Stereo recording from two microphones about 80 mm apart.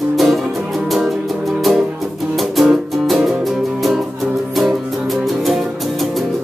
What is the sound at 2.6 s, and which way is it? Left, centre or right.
Music, centre.